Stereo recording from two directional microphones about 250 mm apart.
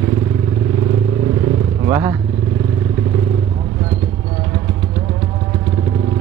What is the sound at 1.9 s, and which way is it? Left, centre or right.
Speech, centre.